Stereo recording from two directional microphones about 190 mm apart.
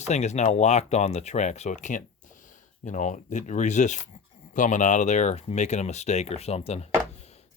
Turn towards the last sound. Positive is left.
turn(degrees=35)  # may be behind; listen again after turning